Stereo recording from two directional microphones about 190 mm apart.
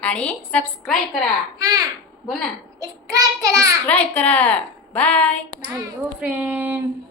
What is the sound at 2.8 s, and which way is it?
Child singing, 20° right (ahead or behind).